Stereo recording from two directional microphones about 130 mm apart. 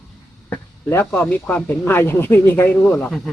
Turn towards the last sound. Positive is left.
turn(degrees=5)  # may be behind; listen again after turning